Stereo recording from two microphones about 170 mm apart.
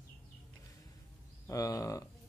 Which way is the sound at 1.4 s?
20° left (ahead or behind).